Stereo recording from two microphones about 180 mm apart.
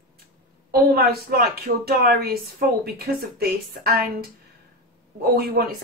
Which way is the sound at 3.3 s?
60° right (ahead or behind).